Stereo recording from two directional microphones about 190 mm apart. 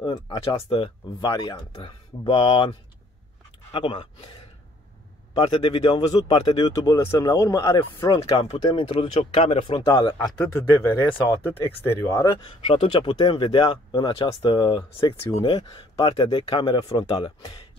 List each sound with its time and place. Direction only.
0.0 s speech: 25° left (ahead or behind)
3.7 s speech: 25° left (ahead or behind)
5.4 s speech: 25° left (ahead or behind)
8.3 s speech: 30° left (ahead or behind); by 12.4 s 15° left (ahead or behind)
12.6 s speech: 25° left (ahead or behind)